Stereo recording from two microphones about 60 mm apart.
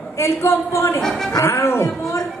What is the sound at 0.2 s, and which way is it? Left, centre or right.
A man's voice, left.